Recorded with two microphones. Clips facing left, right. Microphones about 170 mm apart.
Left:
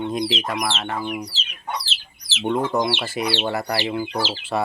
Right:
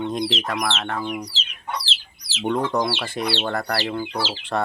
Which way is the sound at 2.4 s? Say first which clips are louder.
Left 1 dB; 5° left (ahead or behind).